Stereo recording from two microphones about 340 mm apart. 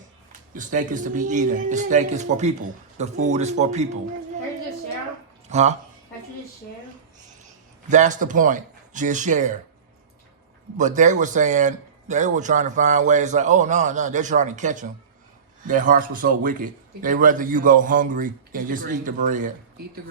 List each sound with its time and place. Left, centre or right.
0.5 s a man's voice: right
5.5 s a man's voice: centre
7.9 s a man's voice: right
10.8 s a man's voice: right